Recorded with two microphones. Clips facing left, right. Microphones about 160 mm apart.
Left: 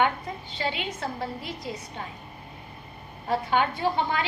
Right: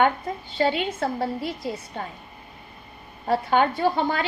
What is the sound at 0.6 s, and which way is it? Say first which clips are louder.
A woman's voice: right 8 dB; 45° right (ahead or behind).